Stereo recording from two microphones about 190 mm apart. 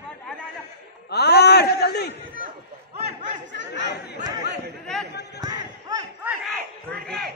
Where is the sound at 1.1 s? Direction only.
60° left (ahead or behind).